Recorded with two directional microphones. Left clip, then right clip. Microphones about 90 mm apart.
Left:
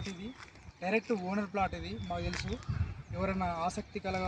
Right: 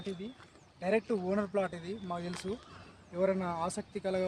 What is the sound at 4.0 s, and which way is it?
Speech, 50° right (ahead or behind).